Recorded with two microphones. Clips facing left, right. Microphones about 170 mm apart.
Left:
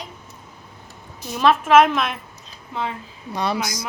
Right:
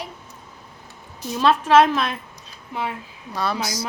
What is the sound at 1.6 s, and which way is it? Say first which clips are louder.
Speech: left 1 dB; 35° right (ahead or behind).